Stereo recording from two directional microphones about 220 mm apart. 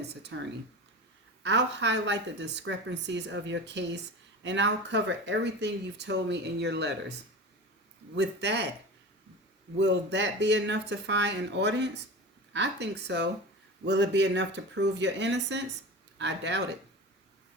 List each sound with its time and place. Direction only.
0.0 s speech: 50° right (ahead or behind)
1.5 s speech: 55° right (ahead or behind)
8.1 s speech: 50° right (ahead or behind)
9.7 s speech: 55° right (ahead or behind)